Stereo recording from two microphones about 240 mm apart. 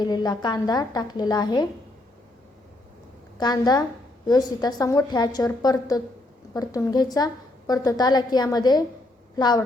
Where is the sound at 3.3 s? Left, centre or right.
Centre.